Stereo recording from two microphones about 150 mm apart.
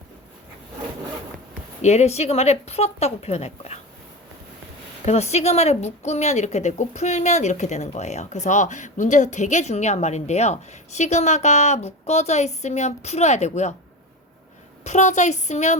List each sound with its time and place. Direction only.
1.8 s a woman's voice: 50° left (ahead or behind)
5.0 s a woman's voice: 45° left (ahead or behind)
14.8 s a woman's voice: 50° left (ahead or behind)